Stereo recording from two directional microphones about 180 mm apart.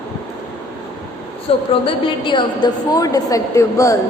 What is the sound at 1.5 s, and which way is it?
A woman's voice, 30° left (ahead or behind).